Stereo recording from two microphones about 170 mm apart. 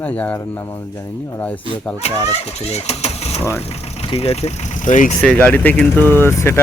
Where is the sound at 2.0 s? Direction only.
40° left (ahead or behind).